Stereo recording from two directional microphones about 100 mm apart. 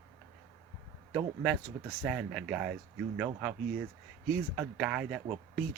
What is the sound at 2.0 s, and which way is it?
Speech, 10° right (ahead or behind).